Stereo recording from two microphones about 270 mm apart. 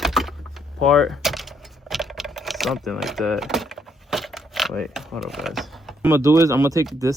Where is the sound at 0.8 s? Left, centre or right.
Centre.